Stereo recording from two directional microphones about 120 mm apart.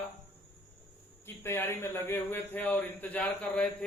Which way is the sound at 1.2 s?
20° left (ahead or behind).